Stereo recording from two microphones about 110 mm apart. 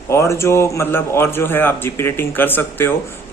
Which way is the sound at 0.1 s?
25° left (ahead or behind).